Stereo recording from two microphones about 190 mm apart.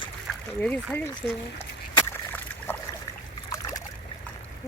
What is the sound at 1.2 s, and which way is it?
Speech, 5° left (ahead or behind).